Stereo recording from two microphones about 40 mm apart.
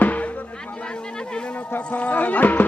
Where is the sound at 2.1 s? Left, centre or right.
Left.